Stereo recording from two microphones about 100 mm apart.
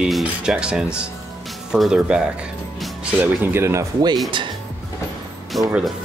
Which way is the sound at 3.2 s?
20° right (ahead or behind).